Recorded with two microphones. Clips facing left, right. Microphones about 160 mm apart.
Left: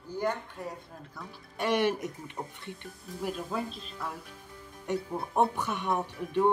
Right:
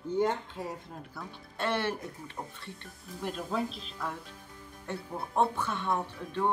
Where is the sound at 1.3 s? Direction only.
15° left (ahead or behind).